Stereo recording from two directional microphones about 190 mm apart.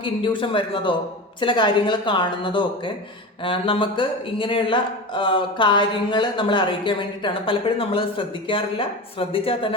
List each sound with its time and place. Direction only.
0.0 s a man's voice: 25° left (ahead or behind)